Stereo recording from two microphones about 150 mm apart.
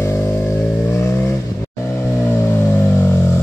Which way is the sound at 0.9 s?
15° left (ahead or behind).